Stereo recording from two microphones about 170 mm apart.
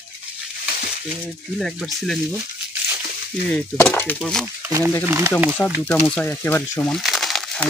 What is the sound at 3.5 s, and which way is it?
Speech, 10° left (ahead or behind).